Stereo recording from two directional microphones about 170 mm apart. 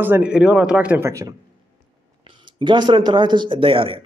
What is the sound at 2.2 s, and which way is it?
Speech, 30° right (ahead or behind).